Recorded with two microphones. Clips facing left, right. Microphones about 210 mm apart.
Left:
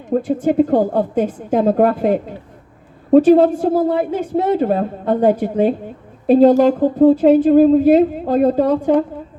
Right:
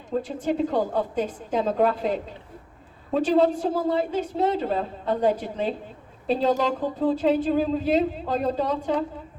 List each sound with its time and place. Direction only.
0.1 s a woman's voice: 55° left (ahead or behind)